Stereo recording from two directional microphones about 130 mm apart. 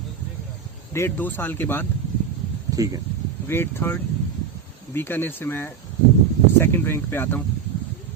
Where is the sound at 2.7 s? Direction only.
25° right (ahead or behind).